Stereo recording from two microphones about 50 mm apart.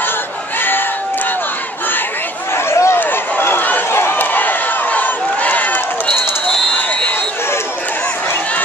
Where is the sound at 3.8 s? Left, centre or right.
Left.